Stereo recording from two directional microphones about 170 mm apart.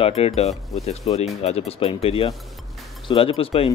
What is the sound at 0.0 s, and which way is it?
Speech, 35° left (ahead or behind).